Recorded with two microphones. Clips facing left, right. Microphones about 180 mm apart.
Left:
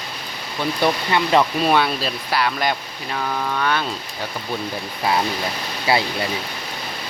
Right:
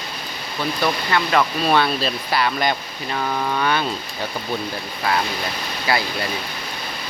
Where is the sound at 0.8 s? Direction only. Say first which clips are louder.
Left 2 dB; 25° left (ahead or behind).